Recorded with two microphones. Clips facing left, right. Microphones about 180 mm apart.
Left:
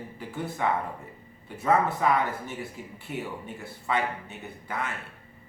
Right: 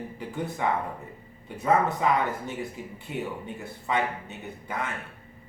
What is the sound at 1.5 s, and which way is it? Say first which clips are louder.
Speech: even; 20° right (ahead or behind).